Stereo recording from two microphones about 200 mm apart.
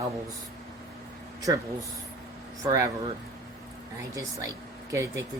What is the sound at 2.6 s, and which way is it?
Speech, 15° right (ahead or behind).